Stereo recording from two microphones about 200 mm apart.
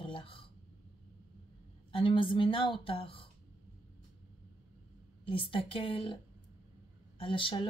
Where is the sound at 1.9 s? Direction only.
25° left (ahead or behind).